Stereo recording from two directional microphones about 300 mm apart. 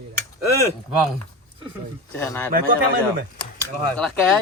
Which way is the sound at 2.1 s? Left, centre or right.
Centre.